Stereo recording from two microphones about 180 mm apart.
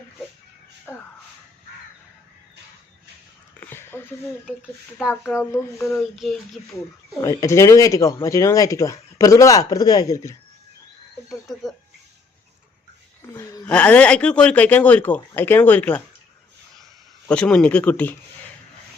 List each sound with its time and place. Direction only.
0.9 s a sound: 10° left (ahead or behind)
3.6 s a sound: 15° left (ahead or behind)
5.3 s speech: 15° left (ahead or behind)
6.1 s speech: centre (ahead or behind)
7.2 s speech: 15° left (ahead or behind)
11.3 s music: centre (ahead or behind)
13.3 s a sound: 15° left (ahead or behind)
13.7 s speech: 5° left (ahead or behind)
17.2 s speech: 5° left (ahead or behind)